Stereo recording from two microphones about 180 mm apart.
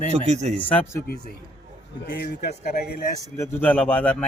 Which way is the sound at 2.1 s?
65° left (ahead or behind).